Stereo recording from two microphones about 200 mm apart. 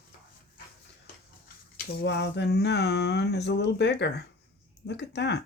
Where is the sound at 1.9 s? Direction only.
55° left (ahead or behind).